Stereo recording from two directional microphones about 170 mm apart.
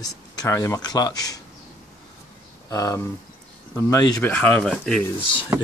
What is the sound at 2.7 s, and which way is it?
Speech, 20° left (ahead or behind).